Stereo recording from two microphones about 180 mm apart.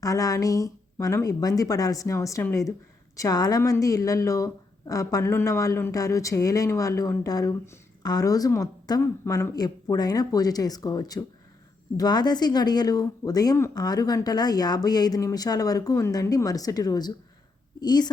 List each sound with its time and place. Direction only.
0.0 s speech: 20° left (ahead or behind)